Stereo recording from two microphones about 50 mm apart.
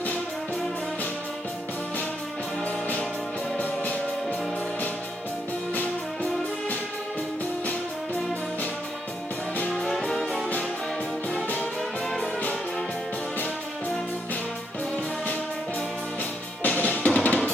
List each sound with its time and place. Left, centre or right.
3.6 s music: left
9.7 s music: centre
16.6 s music: left
17.2 s drum: left